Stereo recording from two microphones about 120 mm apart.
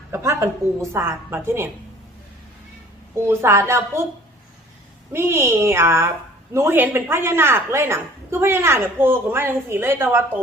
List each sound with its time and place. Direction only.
0.1 s a woman's voice: 25° right (ahead or behind)
3.2 s a woman's voice: 20° right (ahead or behind)
5.1 s a woman's voice: 20° right (ahead or behind)